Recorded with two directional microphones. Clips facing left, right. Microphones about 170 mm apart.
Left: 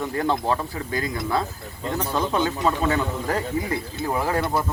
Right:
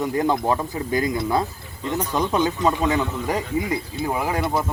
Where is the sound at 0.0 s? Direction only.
15° right (ahead or behind).